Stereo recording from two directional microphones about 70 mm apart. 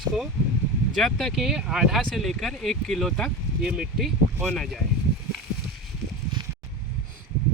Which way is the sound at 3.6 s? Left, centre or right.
Centre.